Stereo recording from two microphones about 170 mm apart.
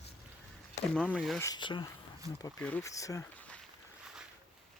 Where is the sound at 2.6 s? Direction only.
10° left (ahead or behind).